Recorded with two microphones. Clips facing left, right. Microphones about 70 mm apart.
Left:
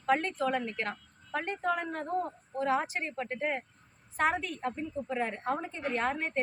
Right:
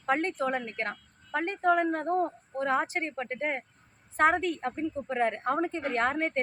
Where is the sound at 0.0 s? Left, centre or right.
Right.